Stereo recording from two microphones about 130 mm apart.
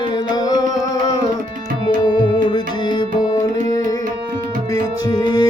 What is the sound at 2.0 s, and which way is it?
Music, 40° left (ahead or behind).